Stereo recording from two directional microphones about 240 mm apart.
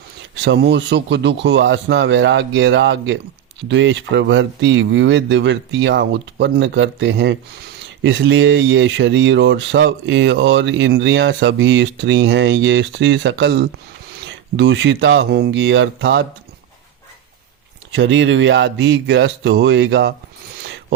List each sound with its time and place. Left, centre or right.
0.3 s speech: right
17.9 s speech: right